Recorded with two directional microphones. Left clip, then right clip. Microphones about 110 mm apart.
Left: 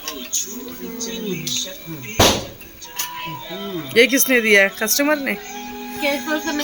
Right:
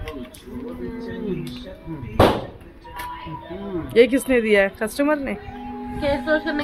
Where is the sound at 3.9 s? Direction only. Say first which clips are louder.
Left 1 dB; 5° left (ahead or behind).